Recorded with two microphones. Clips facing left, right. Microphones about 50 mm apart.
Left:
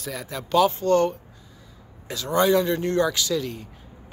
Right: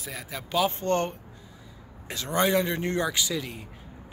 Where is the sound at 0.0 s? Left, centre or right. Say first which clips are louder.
Left 5 dB; centre.